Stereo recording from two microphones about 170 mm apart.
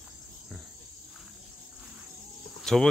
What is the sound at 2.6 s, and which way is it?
Cricket, 5° left (ahead or behind).